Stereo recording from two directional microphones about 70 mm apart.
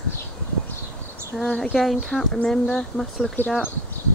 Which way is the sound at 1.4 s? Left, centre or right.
Centre.